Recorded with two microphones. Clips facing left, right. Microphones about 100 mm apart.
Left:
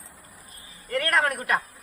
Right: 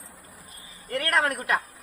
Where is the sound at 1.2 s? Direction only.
35° left (ahead or behind).